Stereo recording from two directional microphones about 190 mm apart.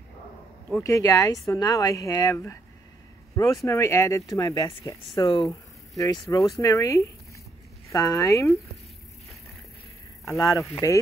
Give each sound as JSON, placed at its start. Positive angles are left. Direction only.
{"t": 0.8, "sound": "speech", "side_deg": 15}
{"t": 10.2, "sound": "speech", "side_deg": 15}